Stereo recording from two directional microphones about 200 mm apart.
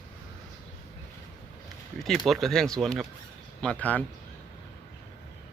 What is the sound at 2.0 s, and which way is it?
Speech, centre (ahead or behind).